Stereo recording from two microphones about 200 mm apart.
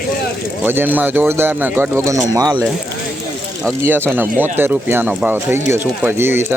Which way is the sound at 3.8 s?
10° right (ahead or behind).